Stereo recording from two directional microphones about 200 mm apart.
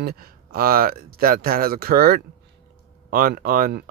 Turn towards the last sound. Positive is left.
turn(degrees=-45)  # may be behind; listen again after turning